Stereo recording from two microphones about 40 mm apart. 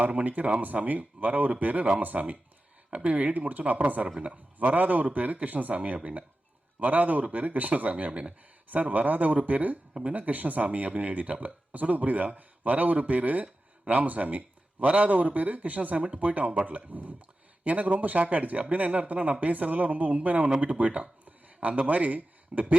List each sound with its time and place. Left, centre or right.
0.1 s speech: right
6.7 s speech: right